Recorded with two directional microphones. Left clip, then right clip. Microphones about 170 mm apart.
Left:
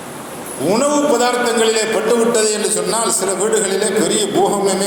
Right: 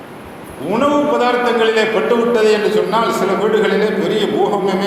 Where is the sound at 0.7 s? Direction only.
15° left (ahead or behind).